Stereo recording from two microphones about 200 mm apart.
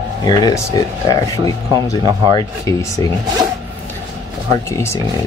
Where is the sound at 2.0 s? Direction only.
20° right (ahead or behind).